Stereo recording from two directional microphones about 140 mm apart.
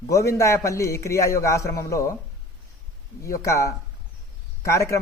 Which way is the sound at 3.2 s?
20° left (ahead or behind).